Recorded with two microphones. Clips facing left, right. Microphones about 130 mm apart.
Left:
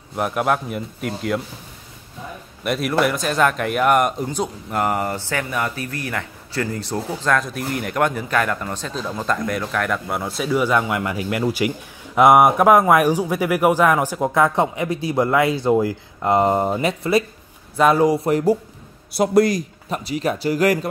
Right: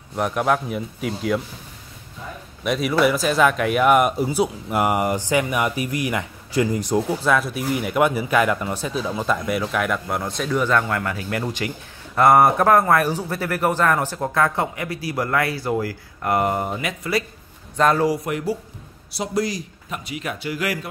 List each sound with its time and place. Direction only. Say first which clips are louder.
0.1 s speech: even; 5° left (ahead or behind)
2.6 s speech: right 1 dB; centre (ahead or behind); by 17.2 s 30° left (ahead or behind)
17.7 s speech: left 3 dB; 10° left (ahead or behind)
18.0 s speech: left 5 dB; 30° left (ahead or behind)
19.1 s a man's voice: left 8 dB; 55° left (ahead or behind)
19.9 s speech: left 7 dB; 35° left (ahead or behind)